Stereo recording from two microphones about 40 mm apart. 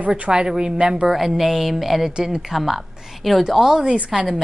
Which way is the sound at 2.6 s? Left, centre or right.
Centre.